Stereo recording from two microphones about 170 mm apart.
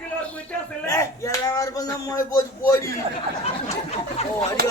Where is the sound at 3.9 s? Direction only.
35° left (ahead or behind).